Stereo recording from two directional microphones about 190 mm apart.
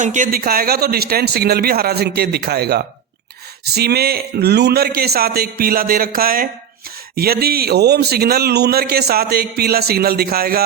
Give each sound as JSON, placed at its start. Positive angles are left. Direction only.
{"t": 0.0, "sound": "a man's voice", "side_deg": -40}